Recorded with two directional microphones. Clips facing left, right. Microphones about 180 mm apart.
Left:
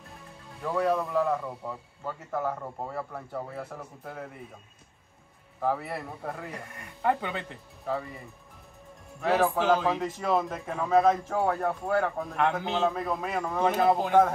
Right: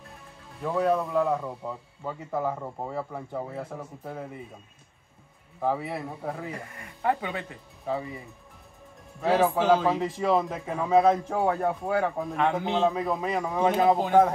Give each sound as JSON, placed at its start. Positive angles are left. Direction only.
{"t": 0.7, "sound": "a man's voice", "side_deg": 0}
{"t": 5.7, "sound": "speech", "side_deg": 0}
{"t": 9.3, "sound": "speech", "side_deg": -5}